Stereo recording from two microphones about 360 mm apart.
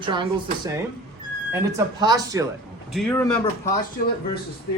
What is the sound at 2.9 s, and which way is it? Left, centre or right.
Speech, centre.